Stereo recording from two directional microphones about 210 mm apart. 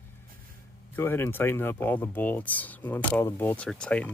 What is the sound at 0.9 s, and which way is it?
Speech, 10° left (ahead or behind).